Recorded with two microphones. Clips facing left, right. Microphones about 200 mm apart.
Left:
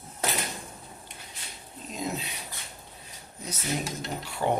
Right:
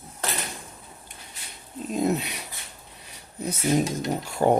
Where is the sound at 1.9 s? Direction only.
60° right (ahead or behind).